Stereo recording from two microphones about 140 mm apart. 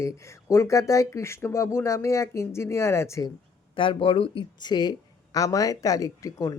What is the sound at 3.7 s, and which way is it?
Speech, 40° left (ahead or behind).